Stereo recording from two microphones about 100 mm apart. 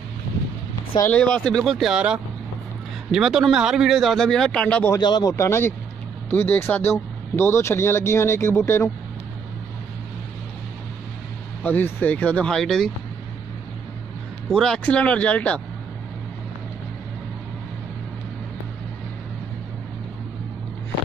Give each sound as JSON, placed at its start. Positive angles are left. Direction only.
{"t": 1.1, "sound": "a man's voice", "side_deg": 10}
{"t": 4.9, "sound": "speech", "side_deg": 45}
{"t": 5.3, "sound": "speech", "side_deg": 25}
{"t": 11.6, "sound": "speech", "side_deg": 20}
{"t": 14.5, "sound": "speech", "side_deg": 5}